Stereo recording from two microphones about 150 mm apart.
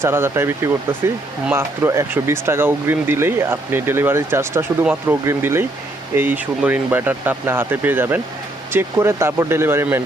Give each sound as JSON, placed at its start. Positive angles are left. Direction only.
{"t": 0.0, "sound": "speech", "side_deg": -15}